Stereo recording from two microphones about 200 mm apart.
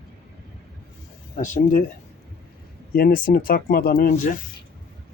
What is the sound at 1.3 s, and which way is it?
Speech, 40° left (ahead or behind).